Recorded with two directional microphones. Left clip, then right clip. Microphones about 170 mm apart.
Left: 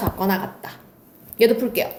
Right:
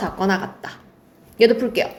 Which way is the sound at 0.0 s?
35° right (ahead or behind).